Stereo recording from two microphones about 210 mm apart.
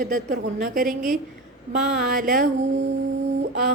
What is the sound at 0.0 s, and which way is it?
A woman's voice, 40° right (ahead or behind).